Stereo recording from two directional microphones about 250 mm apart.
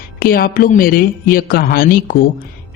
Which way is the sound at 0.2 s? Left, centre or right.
Left.